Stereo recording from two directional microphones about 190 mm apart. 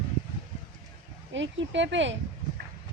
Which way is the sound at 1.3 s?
75° right (ahead or behind).